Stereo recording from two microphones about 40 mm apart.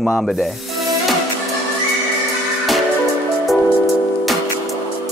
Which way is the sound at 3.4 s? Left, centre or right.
Centre.